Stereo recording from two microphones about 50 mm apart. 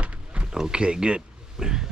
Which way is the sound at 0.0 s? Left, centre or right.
Right.